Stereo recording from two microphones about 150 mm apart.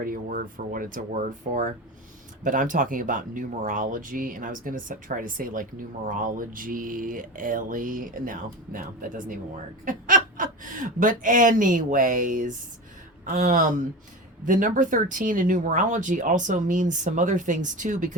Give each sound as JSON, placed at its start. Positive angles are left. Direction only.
{"t": 0.0, "sound": "speech", "side_deg": -75}